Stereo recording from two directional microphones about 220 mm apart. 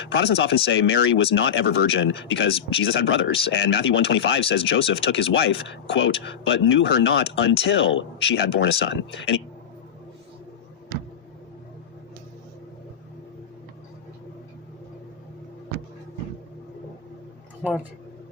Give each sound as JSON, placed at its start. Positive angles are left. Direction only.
{"t": 0.0, "sound": "speech", "side_deg": 50}
{"t": 17.6, "sound": "speech", "side_deg": 0}